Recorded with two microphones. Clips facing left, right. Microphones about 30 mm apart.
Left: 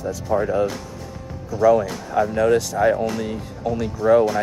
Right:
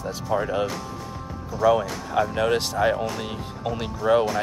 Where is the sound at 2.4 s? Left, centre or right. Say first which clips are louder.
Left 6 dB; right.